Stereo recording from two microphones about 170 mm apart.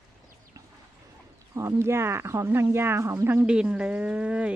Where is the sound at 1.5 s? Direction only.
15° right (ahead or behind).